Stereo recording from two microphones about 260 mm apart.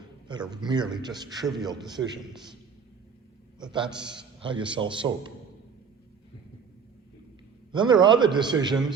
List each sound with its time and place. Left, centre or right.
0.5 s a man's voice: centre
3.6 s a man's voice: centre
7.7 s a man's voice: centre